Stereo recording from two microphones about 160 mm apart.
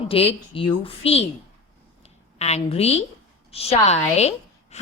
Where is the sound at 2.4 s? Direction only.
40° left (ahead or behind).